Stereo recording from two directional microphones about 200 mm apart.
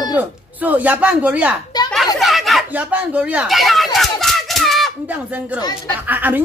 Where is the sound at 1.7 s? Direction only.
20° left (ahead or behind).